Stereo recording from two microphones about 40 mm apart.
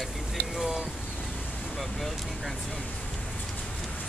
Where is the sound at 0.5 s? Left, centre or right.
Centre.